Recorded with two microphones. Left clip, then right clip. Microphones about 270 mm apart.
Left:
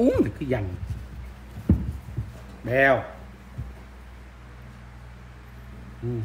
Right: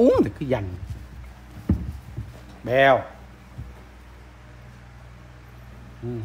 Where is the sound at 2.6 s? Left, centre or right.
Right.